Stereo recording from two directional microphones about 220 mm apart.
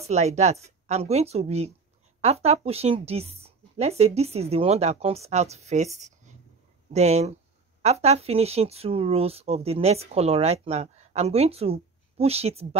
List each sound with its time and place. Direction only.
0.0 s speech: 30° right (ahead or behind)